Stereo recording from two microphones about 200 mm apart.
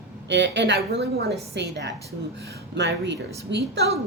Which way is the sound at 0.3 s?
60° right (ahead or behind).